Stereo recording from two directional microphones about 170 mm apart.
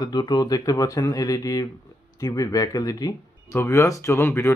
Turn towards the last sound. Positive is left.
turn(degrees=15)  # may be behind; listen again after turning